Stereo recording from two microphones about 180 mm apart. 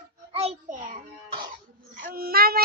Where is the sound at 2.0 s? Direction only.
50° right (ahead or behind).